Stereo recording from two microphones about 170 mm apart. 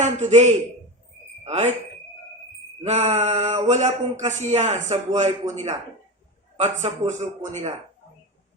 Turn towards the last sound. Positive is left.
turn(degrees=-45)  # may be behind; listen again after turning